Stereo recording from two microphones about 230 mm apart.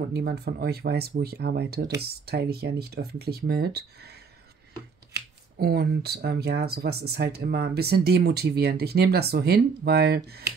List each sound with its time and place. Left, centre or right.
0.1 s speech: right
5.6 s speech: right